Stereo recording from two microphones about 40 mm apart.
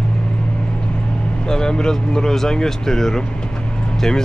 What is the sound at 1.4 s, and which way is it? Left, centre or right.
Speech, centre.